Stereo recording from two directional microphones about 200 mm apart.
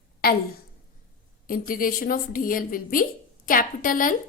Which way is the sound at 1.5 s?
45° left (ahead or behind).